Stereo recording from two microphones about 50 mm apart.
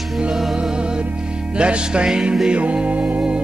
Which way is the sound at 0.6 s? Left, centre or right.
Centre.